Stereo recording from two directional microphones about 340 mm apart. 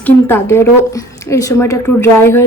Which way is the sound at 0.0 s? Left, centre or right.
Centre.